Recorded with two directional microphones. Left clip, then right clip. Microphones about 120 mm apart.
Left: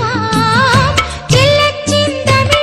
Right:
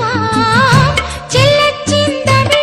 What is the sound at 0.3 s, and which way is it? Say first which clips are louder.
Music: even; 20° left (ahead or behind).